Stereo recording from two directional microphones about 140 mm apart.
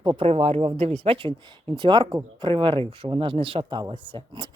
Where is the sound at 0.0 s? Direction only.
40° right (ahead or behind).